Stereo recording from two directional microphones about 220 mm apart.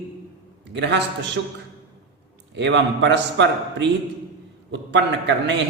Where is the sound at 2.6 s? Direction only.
55° right (ahead or behind).